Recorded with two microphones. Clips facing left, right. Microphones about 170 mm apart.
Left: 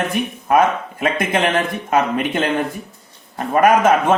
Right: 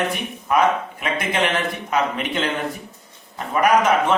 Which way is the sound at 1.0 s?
50° left (ahead or behind).